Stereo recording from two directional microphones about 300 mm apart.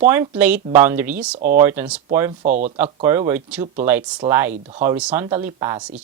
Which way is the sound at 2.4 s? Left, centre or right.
Right.